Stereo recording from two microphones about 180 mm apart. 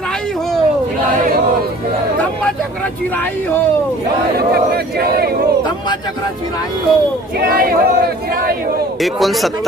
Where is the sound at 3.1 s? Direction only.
10° left (ahead or behind).